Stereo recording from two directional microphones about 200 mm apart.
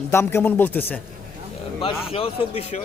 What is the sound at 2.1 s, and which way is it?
Speech, 30° left (ahead or behind).